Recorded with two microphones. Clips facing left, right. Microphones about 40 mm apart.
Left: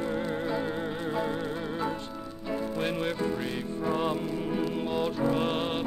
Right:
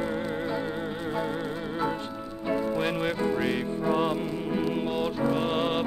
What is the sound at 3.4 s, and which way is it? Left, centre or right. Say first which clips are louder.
Music: right 6 dB; right.